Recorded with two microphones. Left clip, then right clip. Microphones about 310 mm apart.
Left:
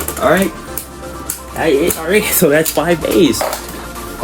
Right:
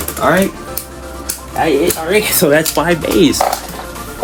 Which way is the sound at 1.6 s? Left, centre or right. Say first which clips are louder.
Even; centre.